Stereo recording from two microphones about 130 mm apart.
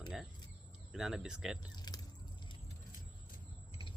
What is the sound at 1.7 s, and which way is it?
Speech, 30° left (ahead or behind).